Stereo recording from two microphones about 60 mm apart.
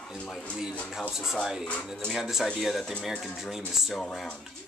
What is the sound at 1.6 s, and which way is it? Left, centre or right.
Speech, centre.